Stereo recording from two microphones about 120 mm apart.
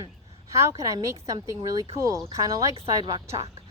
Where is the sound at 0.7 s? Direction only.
30° right (ahead or behind).